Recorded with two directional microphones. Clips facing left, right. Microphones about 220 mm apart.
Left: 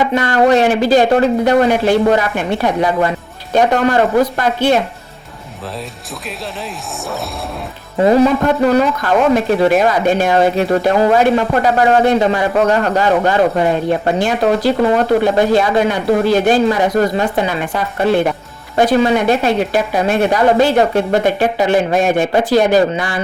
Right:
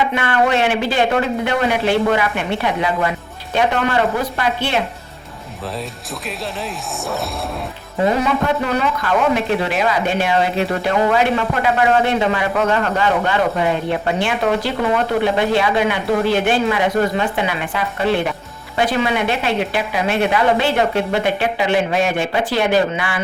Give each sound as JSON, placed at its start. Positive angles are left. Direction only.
{"t": 0.1, "sound": "speech", "side_deg": 40}
{"t": 8.0, "sound": "speech", "side_deg": 35}
{"t": 18.8, "sound": "speech", "side_deg": 40}